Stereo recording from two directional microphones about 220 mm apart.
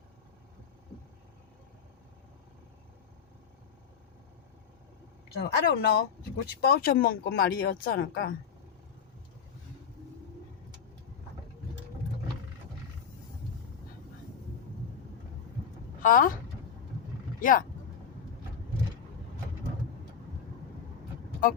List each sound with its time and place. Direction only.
5.4 s speech: 45° left (ahead or behind)
16.0 s speech: 40° left (ahead or behind)
17.4 s speech: 40° left (ahead or behind)